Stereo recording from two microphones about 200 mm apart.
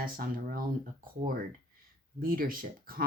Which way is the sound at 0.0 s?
45° right (ahead or behind).